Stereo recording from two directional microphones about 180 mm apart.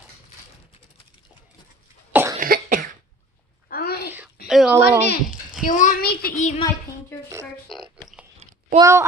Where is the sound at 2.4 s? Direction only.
50° right (ahead or behind).